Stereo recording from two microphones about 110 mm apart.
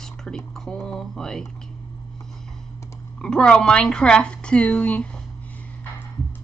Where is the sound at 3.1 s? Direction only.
5° left (ahead or behind).